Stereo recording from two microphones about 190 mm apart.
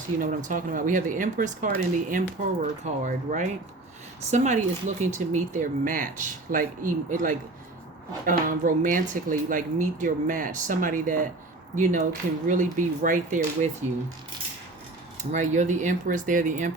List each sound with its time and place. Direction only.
0.2 s speech: 45° right (ahead or behind)
15.2 s speech: 40° right (ahead or behind)